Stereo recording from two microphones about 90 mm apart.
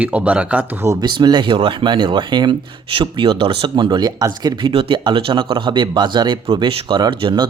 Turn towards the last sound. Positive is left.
turn(degrees=-55)  # may be behind; listen again after turning